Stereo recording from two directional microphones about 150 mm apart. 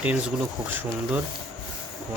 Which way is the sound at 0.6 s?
10° right (ahead or behind).